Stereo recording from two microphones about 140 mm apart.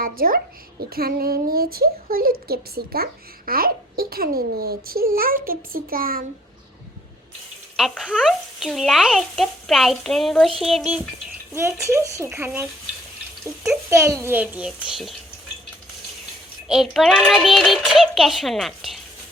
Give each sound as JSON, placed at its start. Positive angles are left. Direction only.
{"t": 0.0, "sound": "speech", "side_deg": -90}
{"t": 7.8, "sound": "music", "side_deg": 0}
{"t": 11.5, "sound": "a woman's voice", "side_deg": -20}
{"t": 13.9, "sound": "a child's voice", "side_deg": -20}
{"t": 16.6, "sound": "music", "side_deg": 0}